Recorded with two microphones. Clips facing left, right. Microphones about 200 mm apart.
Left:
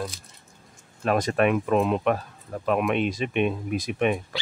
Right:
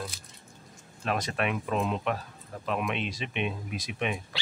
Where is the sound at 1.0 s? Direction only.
50° left (ahead or behind).